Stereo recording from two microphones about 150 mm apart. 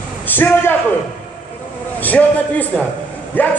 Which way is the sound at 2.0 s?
10° left (ahead or behind).